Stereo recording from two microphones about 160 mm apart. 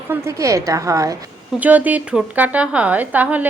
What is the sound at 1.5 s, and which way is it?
Speech, 10° right (ahead or behind).